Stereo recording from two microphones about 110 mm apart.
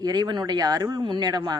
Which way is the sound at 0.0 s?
40° right (ahead or behind).